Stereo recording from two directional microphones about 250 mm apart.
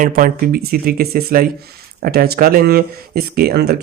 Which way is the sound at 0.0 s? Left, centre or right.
Right.